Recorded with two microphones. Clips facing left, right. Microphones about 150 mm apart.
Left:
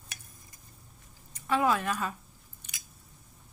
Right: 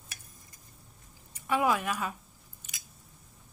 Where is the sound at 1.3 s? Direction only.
10° right (ahead or behind).